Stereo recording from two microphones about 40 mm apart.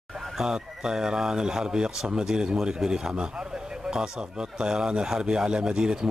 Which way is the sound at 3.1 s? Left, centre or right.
Right.